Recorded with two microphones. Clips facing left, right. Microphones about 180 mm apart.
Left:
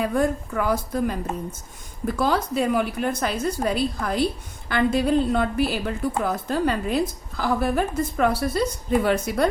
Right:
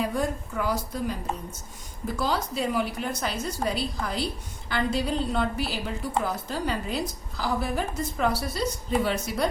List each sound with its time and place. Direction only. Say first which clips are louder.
0.0 s a woman's voice: left 5 dB; 55° left (ahead or behind)